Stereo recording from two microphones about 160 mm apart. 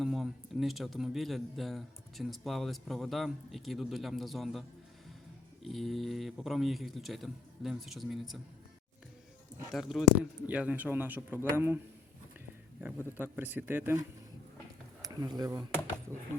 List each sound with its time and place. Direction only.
0.0 s speech: centre (ahead or behind)
5.6 s speech: centre (ahead or behind)
9.7 s speech: centre (ahead or behind)
12.8 s speech: 10° right (ahead or behind)
15.0 s speech: 25° right (ahead or behind)